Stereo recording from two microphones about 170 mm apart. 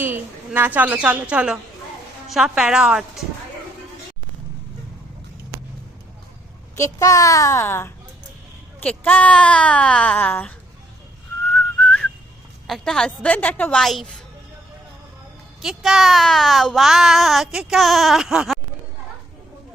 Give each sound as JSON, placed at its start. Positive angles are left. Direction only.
{"t": 0.0, "sound": "a woman's voice", "side_deg": -10}
{"t": 6.7, "sound": "a child's voice", "side_deg": 20}
{"t": 11.5, "sound": "whistling", "side_deg": 5}
{"t": 12.6, "sound": "a child's voice", "side_deg": 0}
{"t": 15.6, "sound": "a child's voice", "side_deg": 0}